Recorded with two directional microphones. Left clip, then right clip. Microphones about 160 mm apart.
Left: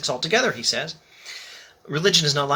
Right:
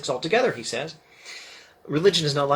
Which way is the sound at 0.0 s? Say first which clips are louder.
Left 1 dB; 25° left (ahead or behind).